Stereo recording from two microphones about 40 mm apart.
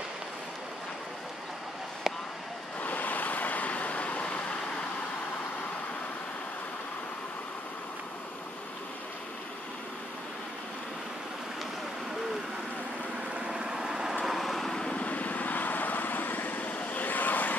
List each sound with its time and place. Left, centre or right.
2.1 s a sound: centre
2.8 s vehicle: left
13.3 s vehicle: centre
14.2 s vehicle: centre
14.7 s vehicle: centre
15.0 s vehicle: left
16.7 s vehicle: left
17.0 s vehicle: left